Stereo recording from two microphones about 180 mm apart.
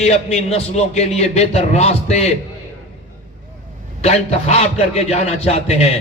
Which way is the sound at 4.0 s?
35° left (ahead or behind).